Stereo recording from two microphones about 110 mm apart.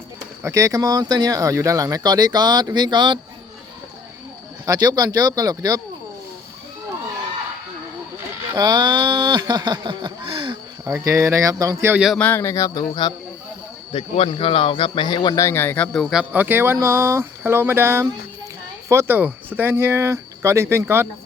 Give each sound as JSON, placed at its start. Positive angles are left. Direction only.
{"t": 0.4, "sound": "speech", "side_deg": -30}
{"t": 4.6, "sound": "speech", "side_deg": -35}
{"t": 8.5, "sound": "speech", "side_deg": -40}
{"t": 10.9, "sound": "speech", "side_deg": -25}
{"t": 12.1, "sound": "speech", "side_deg": 15}
{"t": 12.4, "sound": "speech", "side_deg": 25}
{"t": 13.9, "sound": "speech", "side_deg": 55}
{"t": 15.4, "sound": "speech", "side_deg": 20}
{"t": 15.9, "sound": "speech", "side_deg": 0}
{"t": 16.3, "sound": "speech", "side_deg": -20}